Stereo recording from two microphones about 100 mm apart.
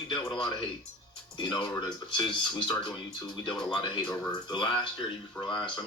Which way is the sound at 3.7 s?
45° left (ahead or behind).